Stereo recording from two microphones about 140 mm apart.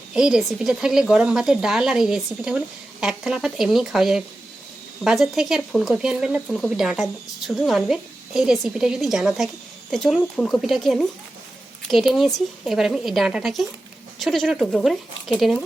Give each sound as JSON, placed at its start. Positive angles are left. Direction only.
{"t": 0.1, "sound": "speech", "side_deg": -5}